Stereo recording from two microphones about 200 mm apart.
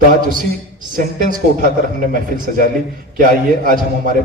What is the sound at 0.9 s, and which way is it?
A woman's voice, 40° right (ahead or behind).